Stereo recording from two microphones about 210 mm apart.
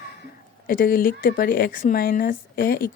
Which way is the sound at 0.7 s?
45° left (ahead or behind).